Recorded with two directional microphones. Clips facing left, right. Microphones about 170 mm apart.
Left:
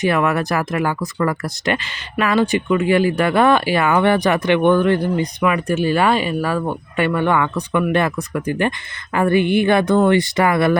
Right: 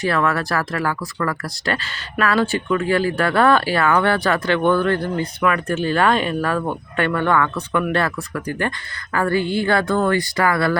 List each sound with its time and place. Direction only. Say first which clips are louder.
0.0 s speech: left 3 dB; 20° left (ahead or behind)